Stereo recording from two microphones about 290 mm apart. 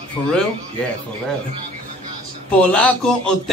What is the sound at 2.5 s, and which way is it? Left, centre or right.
Speech, centre.